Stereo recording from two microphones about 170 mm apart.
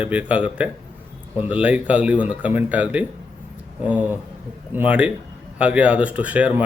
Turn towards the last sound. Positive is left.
turn(degrees=-10)  # may be behind; listen again after turning